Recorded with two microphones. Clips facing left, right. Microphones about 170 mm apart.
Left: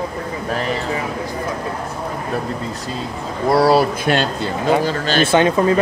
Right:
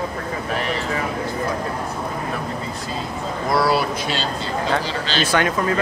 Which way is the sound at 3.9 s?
55° left (ahead or behind).